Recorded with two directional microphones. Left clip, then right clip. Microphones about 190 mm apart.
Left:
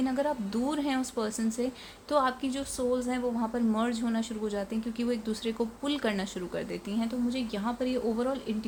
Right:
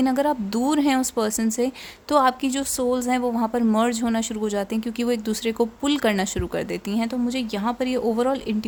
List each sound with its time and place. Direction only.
0.0 s a woman's voice: 45° right (ahead or behind)